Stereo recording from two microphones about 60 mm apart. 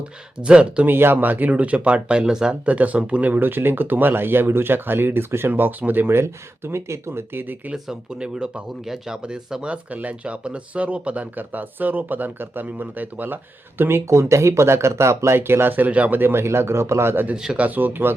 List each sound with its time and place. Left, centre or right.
0.0 s speech: centre
0.9 s speech: right; by 2.6 s centre
2.6 s speech: right
3.3 s speech: right
7.7 s speech: centre; by 17.2 s right
17.3 s speech: centre
17.6 s speech: right